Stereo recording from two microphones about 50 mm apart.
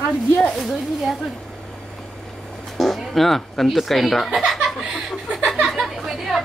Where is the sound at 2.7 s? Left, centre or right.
Centre.